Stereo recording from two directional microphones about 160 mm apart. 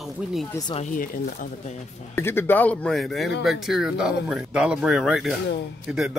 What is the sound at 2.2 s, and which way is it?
A man's voice, 15° left (ahead or behind).